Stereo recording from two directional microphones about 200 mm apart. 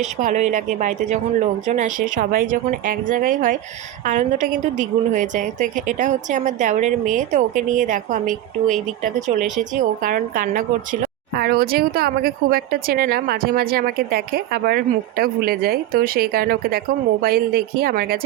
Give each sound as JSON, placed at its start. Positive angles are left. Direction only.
{"t": 0.0, "sound": "a woman's voice", "side_deg": -40}